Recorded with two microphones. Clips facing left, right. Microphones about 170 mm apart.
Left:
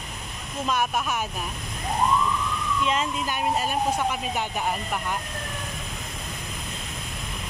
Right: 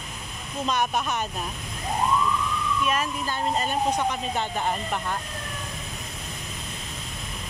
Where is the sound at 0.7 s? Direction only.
5° left (ahead or behind).